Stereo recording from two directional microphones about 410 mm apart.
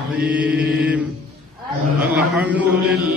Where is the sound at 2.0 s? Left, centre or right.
Centre.